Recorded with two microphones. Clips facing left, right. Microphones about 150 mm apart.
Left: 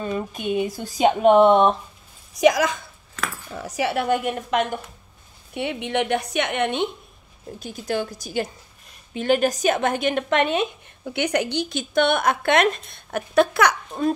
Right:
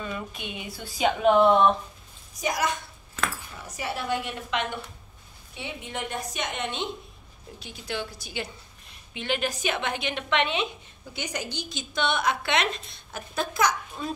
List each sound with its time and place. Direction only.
0.0 s a woman's voice: 40° left (ahead or behind)
2.3 s a woman's voice: 90° left
4.1 s a woman's voice: 45° left (ahead or behind)
5.5 s a woman's voice: 65° left (ahead or behind)
7.5 s a woman's voice: 45° left (ahead or behind); by 14.1 s 60° left (ahead or behind)